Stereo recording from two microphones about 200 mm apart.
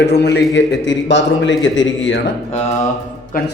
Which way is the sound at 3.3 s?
45° left (ahead or behind).